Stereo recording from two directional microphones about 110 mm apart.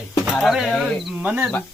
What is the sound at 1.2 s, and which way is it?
Speech, 15° right (ahead or behind).